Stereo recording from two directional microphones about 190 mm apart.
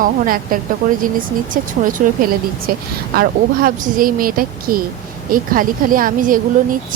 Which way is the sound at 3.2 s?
45° right (ahead or behind).